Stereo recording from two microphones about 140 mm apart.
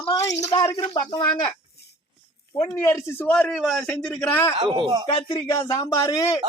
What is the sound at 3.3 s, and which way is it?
A man's voice, 10° left (ahead or behind).